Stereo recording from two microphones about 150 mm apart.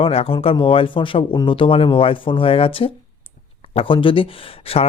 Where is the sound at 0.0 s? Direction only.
40° left (ahead or behind).